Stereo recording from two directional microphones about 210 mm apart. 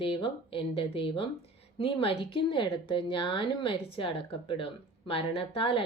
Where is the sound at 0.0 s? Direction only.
25° left (ahead or behind).